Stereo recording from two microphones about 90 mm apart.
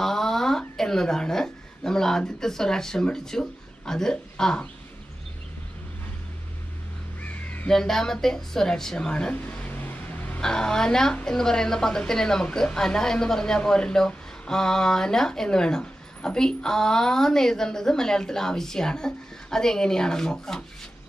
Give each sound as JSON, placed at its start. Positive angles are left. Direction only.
{"t": 0.0, "sound": "a sound", "side_deg": 5}
{"t": 7.2, "sound": "crow", "side_deg": 15}
{"t": 7.7, "sound": "speech", "side_deg": 5}
{"t": 10.4, "sound": "a woman's voice", "side_deg": 10}